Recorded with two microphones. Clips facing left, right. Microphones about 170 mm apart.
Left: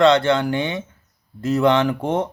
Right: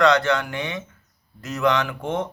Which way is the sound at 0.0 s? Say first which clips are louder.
Left 4 dB; 25° left (ahead or behind).